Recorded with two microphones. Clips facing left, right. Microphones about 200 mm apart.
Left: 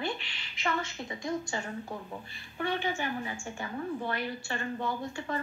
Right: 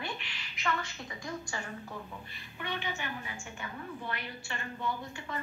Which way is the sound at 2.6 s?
35° left (ahead or behind).